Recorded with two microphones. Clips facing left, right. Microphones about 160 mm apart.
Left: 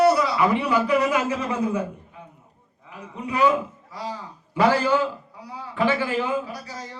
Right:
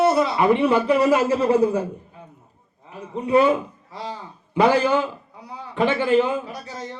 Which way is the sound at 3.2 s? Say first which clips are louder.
Right 4 dB; 30° right (ahead or behind).